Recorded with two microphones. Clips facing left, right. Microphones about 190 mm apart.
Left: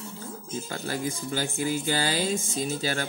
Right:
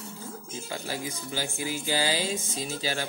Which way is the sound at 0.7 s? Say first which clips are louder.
Left 3 dB; 50° left (ahead or behind).